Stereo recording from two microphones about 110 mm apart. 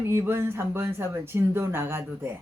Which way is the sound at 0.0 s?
20° right (ahead or behind).